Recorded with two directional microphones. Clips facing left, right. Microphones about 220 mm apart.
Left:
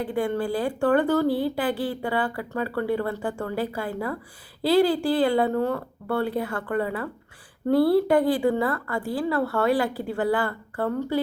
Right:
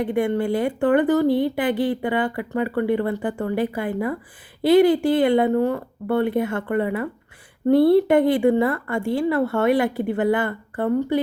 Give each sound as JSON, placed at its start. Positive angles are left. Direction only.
{"t": 0.0, "sound": "speech", "side_deg": -20}